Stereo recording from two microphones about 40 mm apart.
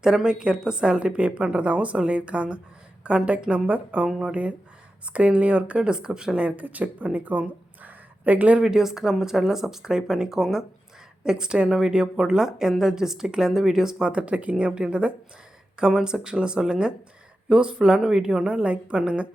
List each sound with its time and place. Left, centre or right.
0.0 s a woman's voice: centre
6.6 s a woman's voice: right
7.8 s a sound: right
8.6 s speech: centre
14.1 s a woman's voice: right
14.5 s a woman's voice: right